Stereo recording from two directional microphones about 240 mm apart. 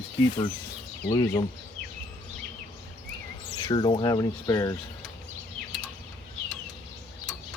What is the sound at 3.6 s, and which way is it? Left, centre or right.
Speech, left.